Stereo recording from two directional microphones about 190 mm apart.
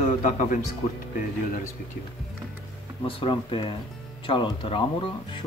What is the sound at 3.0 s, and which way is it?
Speech, 25° left (ahead or behind).